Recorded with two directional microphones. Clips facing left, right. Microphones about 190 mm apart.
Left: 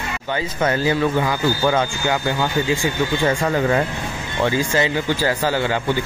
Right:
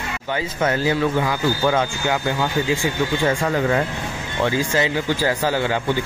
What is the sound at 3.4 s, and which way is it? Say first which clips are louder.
Speech: left 1 dB; 15° left (ahead or behind).